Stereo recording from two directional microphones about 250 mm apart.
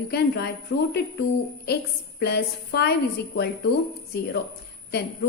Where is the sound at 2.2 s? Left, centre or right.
Left.